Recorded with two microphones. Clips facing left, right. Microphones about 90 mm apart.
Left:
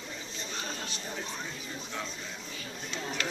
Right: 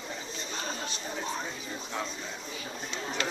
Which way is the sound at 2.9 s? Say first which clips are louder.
Right 1 dB; 25° right (ahead or behind).